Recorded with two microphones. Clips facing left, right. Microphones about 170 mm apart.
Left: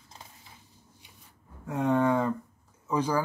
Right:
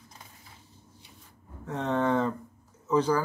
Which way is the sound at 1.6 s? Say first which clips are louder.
Left 2 dB; 10° left (ahead or behind).